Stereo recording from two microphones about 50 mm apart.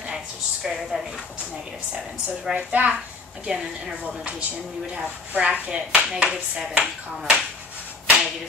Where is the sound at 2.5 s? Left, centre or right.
Right.